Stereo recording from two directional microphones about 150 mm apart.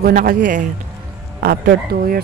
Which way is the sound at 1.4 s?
90° right.